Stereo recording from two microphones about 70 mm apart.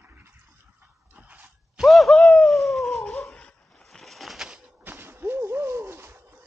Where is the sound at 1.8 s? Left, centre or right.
Centre.